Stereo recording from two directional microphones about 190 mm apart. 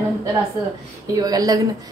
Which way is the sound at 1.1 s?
20° right (ahead or behind).